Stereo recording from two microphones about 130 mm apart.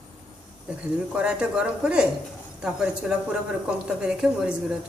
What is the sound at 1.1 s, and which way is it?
Speech, 10° right (ahead or behind).